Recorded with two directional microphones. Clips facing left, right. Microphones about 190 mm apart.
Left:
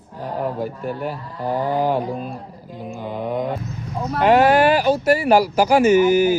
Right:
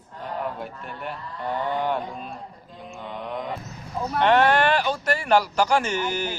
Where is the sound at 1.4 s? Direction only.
35° left (ahead or behind).